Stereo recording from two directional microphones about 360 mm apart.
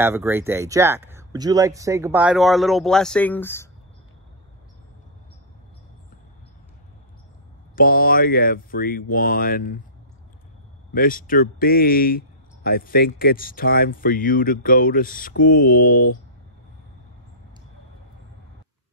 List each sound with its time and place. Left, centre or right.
0.0 s speech: centre
7.7 s speech: left
10.9 s speech: left